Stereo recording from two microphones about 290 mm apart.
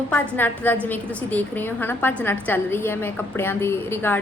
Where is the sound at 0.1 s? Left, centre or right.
Centre.